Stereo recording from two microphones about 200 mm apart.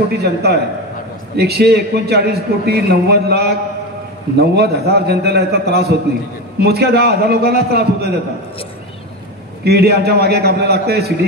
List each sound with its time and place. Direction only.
0.2 s a man's voice: 50° right (ahead or behind)
9.7 s a man's voice: 55° right (ahead or behind)